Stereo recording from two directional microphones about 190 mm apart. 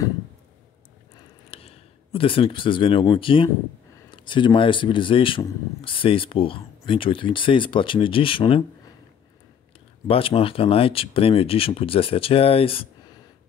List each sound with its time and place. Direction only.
1.5 s speech: 30° left (ahead or behind)
10.0 s speech: 30° left (ahead or behind)